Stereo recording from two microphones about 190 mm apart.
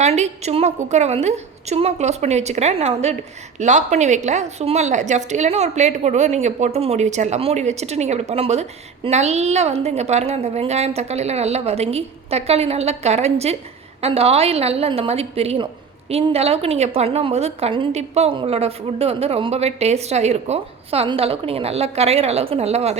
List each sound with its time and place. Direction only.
0.0 s a woman's voice: 35° right (ahead or behind)